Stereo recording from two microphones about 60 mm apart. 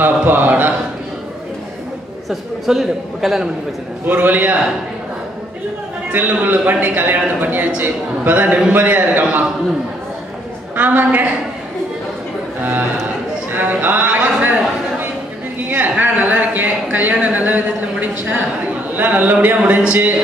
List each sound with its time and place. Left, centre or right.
0.0 s a man's voice: right
2.2 s a man's voice: centre
4.0 s a man's voice: right
6.1 s a man's voice: right
10.8 s a man's voice: right
13.5 s a sound: right
15.7 s a sound: right
18.9 s a man's voice: right